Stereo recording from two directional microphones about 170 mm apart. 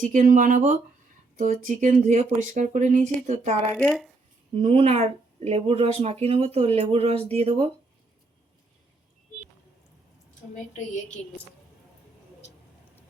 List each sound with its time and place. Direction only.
0.0 s speech: 50° right (ahead or behind)
3.8 s speech: centre (ahead or behind)
4.5 s speech: 35° right (ahead or behind)